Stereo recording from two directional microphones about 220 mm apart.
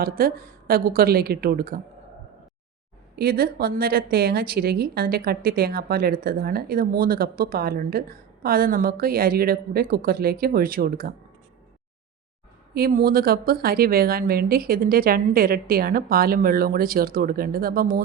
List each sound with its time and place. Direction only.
0.0 s a woman's voice: 40° right (ahead or behind)
3.2 s a woman's voice: 45° right (ahead or behind)
12.7 s a woman's voice: 45° right (ahead or behind)